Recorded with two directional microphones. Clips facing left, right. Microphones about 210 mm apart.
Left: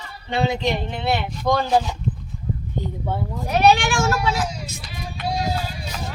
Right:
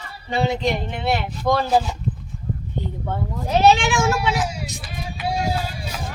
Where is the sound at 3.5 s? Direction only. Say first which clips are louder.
Right 1 dB; 25° right (ahead or behind).